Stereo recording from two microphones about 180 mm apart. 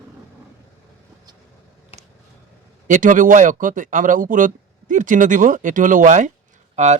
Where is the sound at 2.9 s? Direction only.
45° right (ahead or behind).